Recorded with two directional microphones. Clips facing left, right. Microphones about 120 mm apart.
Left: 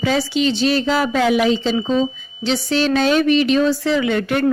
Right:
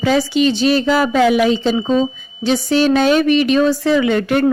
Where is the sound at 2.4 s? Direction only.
50° right (ahead or behind).